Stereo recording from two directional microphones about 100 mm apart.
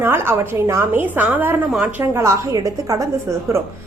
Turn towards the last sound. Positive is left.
turn(degrees=-35)  # may be behind; listen again after turning